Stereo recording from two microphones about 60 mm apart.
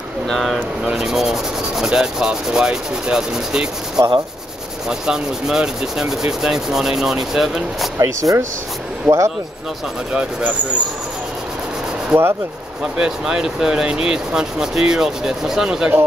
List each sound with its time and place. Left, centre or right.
0.3 s speech: centre
0.9 s rub: centre
8.0 s speech: right
9.1 s rub: centre
12.1 s rub: centre